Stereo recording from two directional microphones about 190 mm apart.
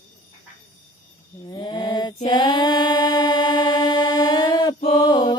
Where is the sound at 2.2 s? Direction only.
20° left (ahead or behind).